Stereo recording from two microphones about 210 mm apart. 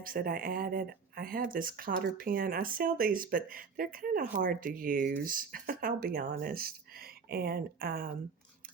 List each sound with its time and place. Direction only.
0.0 s speech: 45° right (ahead or behind)